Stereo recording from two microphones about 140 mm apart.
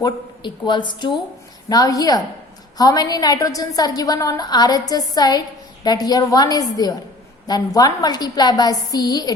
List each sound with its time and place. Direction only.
0.0 s a woman's voice: 35° left (ahead or behind)